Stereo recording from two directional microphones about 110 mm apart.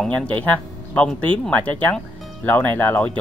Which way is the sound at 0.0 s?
15° left (ahead or behind).